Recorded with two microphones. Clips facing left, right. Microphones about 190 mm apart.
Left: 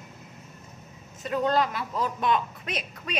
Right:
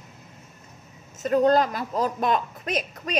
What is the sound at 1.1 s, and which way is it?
Speech, 45° right (ahead or behind).